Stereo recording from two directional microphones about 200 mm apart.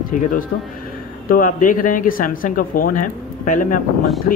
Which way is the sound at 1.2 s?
45° left (ahead or behind).